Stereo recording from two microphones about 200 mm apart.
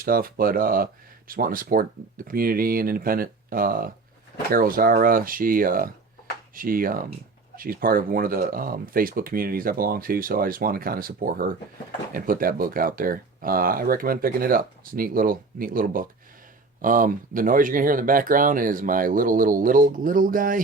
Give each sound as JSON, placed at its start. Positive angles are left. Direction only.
{"t": 0.0, "sound": "speech", "side_deg": -45}